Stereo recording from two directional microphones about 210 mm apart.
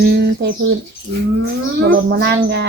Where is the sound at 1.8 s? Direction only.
55° right (ahead or behind).